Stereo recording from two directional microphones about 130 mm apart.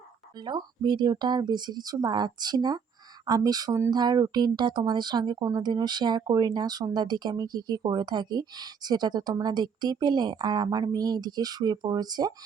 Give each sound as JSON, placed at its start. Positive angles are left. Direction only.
{"t": 0.3, "sound": "speech", "side_deg": -35}